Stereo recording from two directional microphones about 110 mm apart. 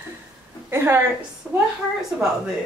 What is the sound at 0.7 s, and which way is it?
Speech, 20° right (ahead or behind).